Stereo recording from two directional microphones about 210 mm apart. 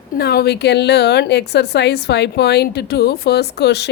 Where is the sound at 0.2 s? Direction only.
50° left (ahead or behind).